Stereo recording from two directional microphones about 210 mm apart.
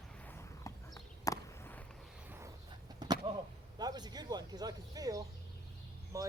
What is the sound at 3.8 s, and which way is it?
Speech, 20° right (ahead or behind).